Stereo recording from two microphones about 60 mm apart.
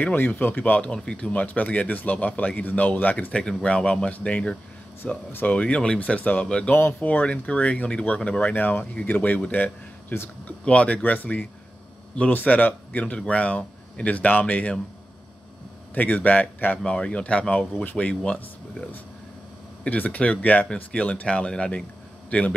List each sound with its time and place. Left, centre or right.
0.0 s speech: left; by 1.3 s centre
1.3 s speech: left
3.3 s speech: centre
5.0 s speech: left
5.6 s a man's voice: centre
15.9 s speech: left
22.3 s speech: left